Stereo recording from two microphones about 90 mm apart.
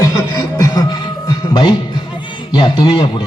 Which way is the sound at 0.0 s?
30° left (ahead or behind).